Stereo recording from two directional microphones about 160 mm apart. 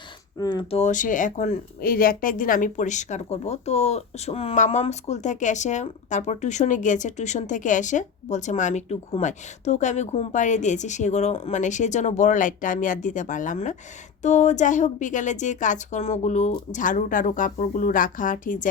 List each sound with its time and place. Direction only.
0.3 s speech: 25° left (ahead or behind)
0.7 s speech: 45° left (ahead or behind)